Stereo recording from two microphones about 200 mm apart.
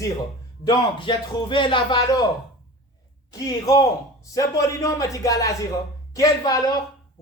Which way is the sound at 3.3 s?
15° left (ahead or behind).